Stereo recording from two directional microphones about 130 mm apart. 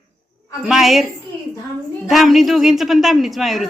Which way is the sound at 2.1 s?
Centre (ahead or behind).